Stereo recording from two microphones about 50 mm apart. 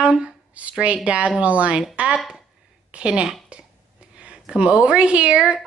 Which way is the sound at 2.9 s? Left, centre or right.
Centre.